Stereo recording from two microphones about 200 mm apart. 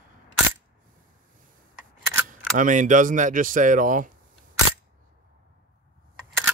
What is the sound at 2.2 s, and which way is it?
Speech, 40° right (ahead or behind).